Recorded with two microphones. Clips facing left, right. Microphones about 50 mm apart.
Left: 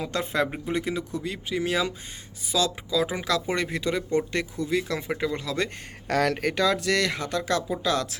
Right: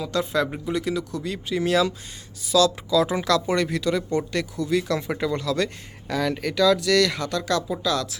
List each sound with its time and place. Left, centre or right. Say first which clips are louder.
0.0 s speech: right 2 dB; left
1.2 s speech: right 3 dB; centre
6.1 s speech: left 1 dB; left
6.4 s speech: right 4 dB; left